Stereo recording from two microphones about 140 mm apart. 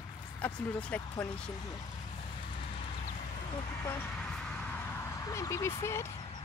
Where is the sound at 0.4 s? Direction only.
10° left (ahead or behind).